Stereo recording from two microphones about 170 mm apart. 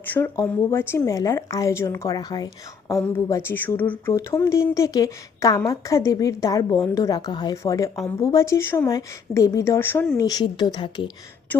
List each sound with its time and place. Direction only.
0.1 s a woman's voice: 10° left (ahead or behind)
10.2 s speech: 25° left (ahead or behind)